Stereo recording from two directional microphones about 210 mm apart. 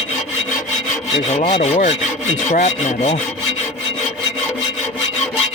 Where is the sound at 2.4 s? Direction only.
35° left (ahead or behind).